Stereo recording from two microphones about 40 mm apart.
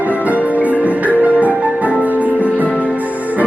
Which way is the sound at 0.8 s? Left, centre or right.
Right.